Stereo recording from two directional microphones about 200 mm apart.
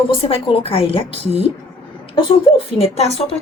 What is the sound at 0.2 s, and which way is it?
A woman's voice, 25° left (ahead or behind).